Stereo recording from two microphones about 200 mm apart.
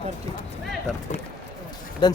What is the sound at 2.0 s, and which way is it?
Speech, 25° left (ahead or behind).